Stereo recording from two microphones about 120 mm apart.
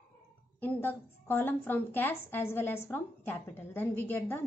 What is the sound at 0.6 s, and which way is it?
A woman's voice, 15° left (ahead or behind).